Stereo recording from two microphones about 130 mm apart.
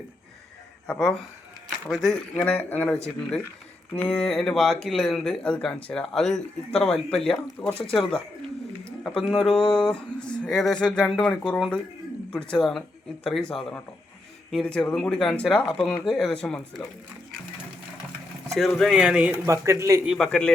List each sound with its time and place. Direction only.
0.9 s speech: 5° left (ahead or behind)
2.3 s speech: 10° left (ahead or behind)
18.5 s speech: centre (ahead or behind)
19.5 s a man's voice: 25° right (ahead or behind)
20.1 s speech: 5° left (ahead or behind)